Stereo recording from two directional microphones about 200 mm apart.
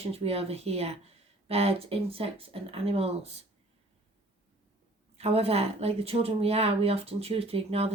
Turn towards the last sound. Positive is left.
turn(degrees=-30)  # may be behind; listen again after turning